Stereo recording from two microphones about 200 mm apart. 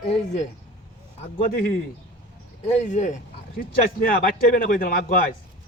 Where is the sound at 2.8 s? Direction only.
40° left (ahead or behind).